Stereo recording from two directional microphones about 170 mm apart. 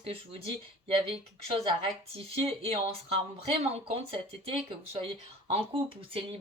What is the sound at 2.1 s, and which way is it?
Speech, 35° right (ahead or behind).